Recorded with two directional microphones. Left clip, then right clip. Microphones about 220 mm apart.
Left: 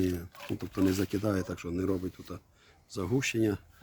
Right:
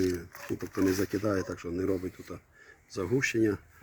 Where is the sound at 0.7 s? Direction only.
45° left (ahead or behind).